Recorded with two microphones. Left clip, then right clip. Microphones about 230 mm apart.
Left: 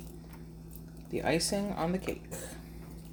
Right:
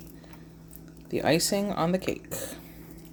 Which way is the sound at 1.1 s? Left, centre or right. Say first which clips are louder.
Right 6 dB; right.